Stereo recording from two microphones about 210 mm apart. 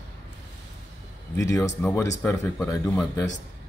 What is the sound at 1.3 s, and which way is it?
Speech, 15° left (ahead or behind).